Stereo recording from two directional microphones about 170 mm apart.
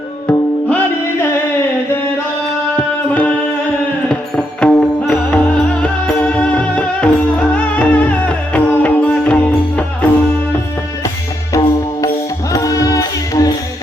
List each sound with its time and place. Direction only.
0.3 s music: 10° left (ahead or behind)
2.7 s music: 5° left (ahead or behind)
12.0 s music: 20° left (ahead or behind)